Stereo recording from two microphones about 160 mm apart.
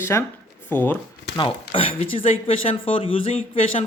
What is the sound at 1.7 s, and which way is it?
Speech, 35° left (ahead or behind).